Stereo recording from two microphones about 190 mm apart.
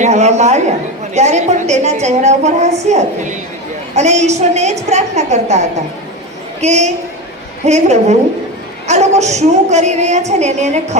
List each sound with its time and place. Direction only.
0.0 s a woman's voice: 35° right (ahead or behind)